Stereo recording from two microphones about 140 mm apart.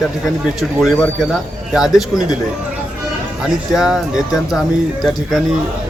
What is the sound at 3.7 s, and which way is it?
Speech, 5° right (ahead or behind).